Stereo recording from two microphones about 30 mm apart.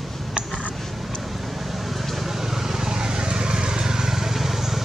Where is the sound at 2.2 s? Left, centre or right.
Centre.